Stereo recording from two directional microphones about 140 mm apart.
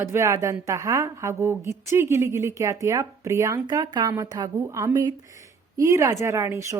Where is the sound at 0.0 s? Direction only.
20° right (ahead or behind).